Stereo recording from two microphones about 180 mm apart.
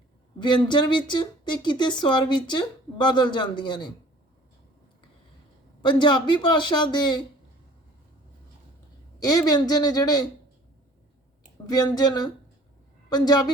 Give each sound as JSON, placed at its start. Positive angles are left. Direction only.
{"t": 0.3, "sound": "speech", "side_deg": 25}
{"t": 5.8, "sound": "speech", "side_deg": 25}
{"t": 9.2, "sound": "speech", "side_deg": 20}
{"t": 11.6, "sound": "a woman's voice", "side_deg": 20}